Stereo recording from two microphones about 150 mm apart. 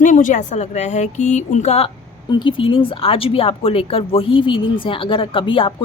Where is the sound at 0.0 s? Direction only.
60° left (ahead or behind).